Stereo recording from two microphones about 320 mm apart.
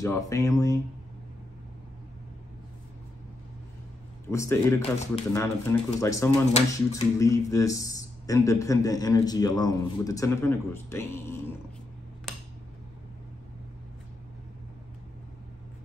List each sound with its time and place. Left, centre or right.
0.0 s speech: centre
4.3 s speech: centre
4.9 s speech: left
5.3 s speech: centre